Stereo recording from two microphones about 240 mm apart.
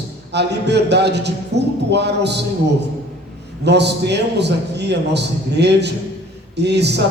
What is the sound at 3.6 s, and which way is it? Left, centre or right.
A man's voice, right.